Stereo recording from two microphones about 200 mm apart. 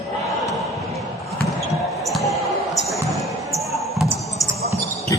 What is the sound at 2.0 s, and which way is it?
Basketball bounce, centre (ahead or behind).